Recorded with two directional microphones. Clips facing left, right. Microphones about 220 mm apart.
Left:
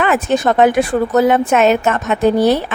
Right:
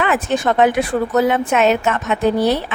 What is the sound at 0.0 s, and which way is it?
Speech, 45° left (ahead or behind).